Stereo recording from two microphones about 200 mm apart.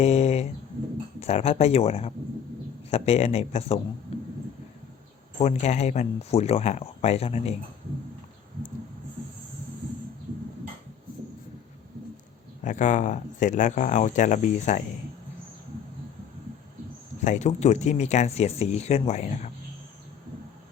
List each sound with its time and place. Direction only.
0.0 s a sound: 35° left (ahead or behind)
1.2 s speech: 30° left (ahead or behind)
4.1 s a sound: 30° left (ahead or behind)
5.4 s speech: 35° left (ahead or behind)
12.6 s speech: 40° left (ahead or behind)
17.2 s speech: 35° left (ahead or behind)